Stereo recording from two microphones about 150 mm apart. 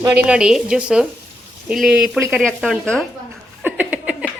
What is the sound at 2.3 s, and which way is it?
Speech, 5° left (ahead or behind).